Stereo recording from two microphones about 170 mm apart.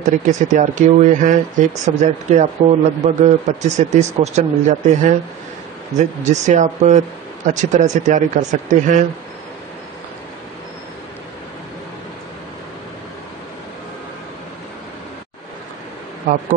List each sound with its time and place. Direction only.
0.0 s speech: 45° right (ahead or behind)
16.3 s speech: 50° right (ahead or behind)